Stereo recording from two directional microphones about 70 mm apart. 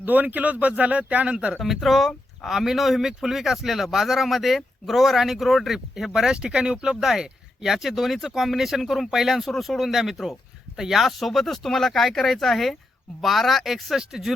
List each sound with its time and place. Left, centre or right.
0.0 s speech: right
1.5 s speech: centre